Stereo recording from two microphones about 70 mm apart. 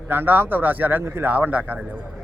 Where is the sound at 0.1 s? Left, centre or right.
Right.